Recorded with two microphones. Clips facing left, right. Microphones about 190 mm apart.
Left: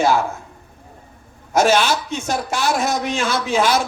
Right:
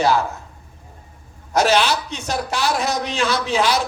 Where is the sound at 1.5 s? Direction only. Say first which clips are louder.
Left 1 dB; 50° left (ahead or behind).